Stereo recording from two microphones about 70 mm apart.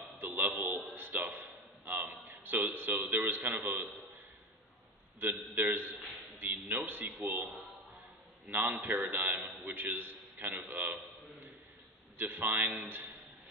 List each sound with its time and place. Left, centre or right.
0.4 s a man's voice: right
5.2 s a man's voice: right
6.7 s a man's voice: right
7.0 s a man's voice: right
8.5 s a man's voice: right
12.2 s a man's voice: right